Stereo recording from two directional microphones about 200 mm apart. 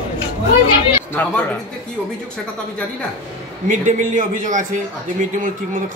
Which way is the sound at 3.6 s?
40° right (ahead or behind).